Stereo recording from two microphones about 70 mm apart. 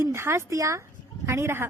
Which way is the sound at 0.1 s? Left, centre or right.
Right.